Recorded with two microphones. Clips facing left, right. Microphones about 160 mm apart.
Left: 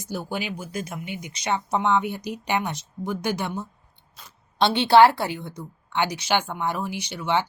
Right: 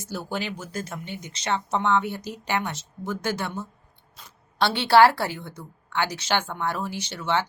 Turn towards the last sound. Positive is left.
turn(degrees=15)  # may be behind; listen again after turning